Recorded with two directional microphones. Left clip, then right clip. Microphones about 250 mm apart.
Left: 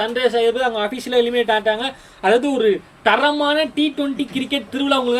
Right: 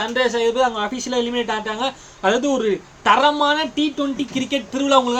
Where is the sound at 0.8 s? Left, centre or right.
Centre.